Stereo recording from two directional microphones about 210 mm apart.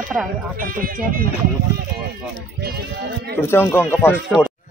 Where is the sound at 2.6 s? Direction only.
50° right (ahead or behind).